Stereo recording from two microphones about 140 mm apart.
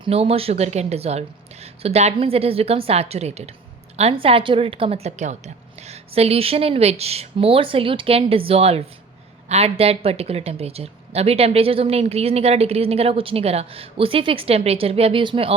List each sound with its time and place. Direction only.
0.0 s speech: 45° right (ahead or behind)